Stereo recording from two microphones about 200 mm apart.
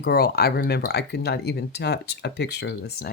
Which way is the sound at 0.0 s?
50° left (ahead or behind).